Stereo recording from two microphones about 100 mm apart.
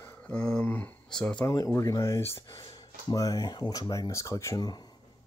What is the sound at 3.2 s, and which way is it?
Speech, 40° left (ahead or behind).